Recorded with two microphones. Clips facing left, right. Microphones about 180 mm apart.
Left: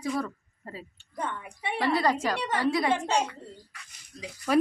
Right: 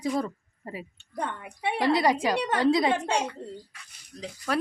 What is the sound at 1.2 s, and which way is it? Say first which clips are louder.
Speech: right 2 dB; 65° right (ahead or behind).